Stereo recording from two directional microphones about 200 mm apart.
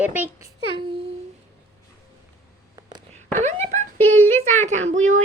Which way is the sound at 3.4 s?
35° right (ahead or behind).